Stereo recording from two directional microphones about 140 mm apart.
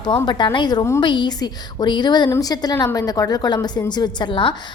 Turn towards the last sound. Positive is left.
turn(degrees=35)  # may be behind; listen again after turning